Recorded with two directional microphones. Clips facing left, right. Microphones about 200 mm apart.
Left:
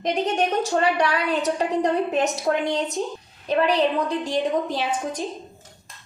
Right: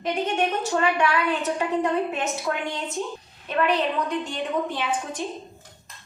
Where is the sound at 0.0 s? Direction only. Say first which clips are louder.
Left 2 dB; 40° left (ahead or behind).